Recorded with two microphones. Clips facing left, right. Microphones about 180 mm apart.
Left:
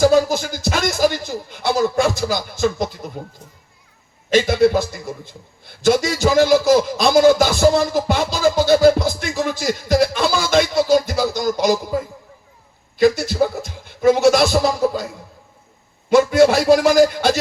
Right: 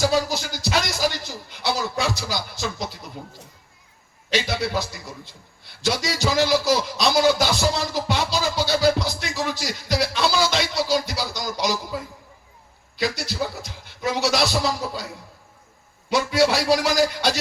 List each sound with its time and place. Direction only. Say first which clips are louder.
0.0 s speech: left 7 dB; 50° left (ahead or behind)
4.3 s a man's voice: left 10 dB; 50° left (ahead or behind)